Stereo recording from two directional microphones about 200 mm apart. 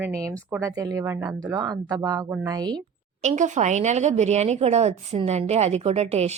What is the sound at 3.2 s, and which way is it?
Speech, 35° right (ahead or behind).